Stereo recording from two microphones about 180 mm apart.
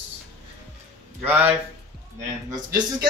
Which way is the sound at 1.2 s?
10° right (ahead or behind).